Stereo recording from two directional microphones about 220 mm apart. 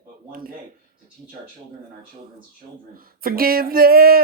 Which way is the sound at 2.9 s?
40° right (ahead or behind).